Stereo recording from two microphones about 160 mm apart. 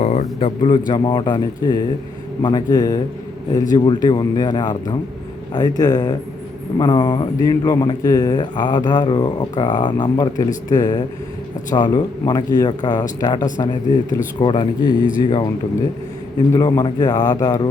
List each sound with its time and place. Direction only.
0.0 s speech: 45° left (ahead or behind); by 15.4 s 30° left (ahead or behind)
16.5 s speech: 25° left (ahead or behind)